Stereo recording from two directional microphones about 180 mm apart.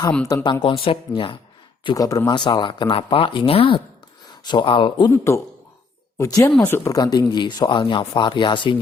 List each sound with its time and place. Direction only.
0.4 s speech: 20° left (ahead or behind)